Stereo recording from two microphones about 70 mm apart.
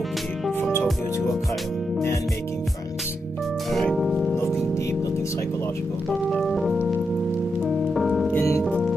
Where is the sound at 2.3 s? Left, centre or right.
Left.